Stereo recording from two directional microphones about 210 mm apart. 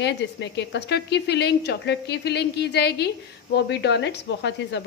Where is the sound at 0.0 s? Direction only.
55° left (ahead or behind).